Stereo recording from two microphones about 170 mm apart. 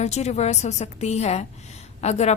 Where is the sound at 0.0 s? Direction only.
40° left (ahead or behind).